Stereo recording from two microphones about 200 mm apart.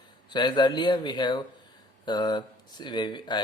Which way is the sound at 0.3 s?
20° left (ahead or behind).